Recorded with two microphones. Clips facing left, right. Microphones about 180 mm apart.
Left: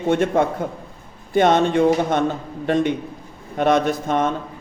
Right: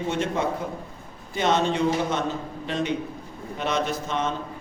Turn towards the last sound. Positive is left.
turn(degrees=50)  # may be behind; listen again after turning